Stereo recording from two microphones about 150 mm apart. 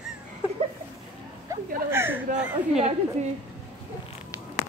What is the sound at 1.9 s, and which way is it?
Speech, 15° right (ahead or behind).